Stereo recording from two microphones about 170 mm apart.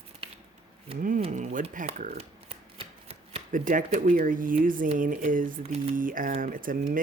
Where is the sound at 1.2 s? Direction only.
40° right (ahead or behind).